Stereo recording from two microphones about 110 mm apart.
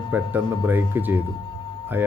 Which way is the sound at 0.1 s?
15° right (ahead or behind).